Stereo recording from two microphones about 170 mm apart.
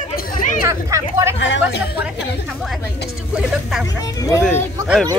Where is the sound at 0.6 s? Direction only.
15° right (ahead or behind).